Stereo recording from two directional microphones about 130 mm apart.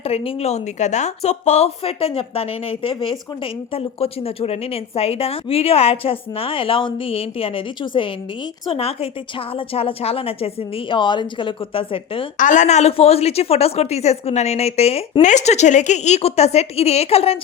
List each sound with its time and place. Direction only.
0.0 s a woman's voice: 50° left (ahead or behind)
12.4 s a woman's voice: 75° left (ahead or behind); by 17.3 s 50° left (ahead or behind)